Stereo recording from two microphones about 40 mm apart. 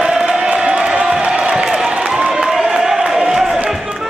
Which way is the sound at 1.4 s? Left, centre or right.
Centre.